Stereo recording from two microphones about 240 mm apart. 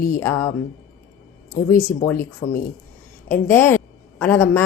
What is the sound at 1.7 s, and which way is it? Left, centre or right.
Music, left.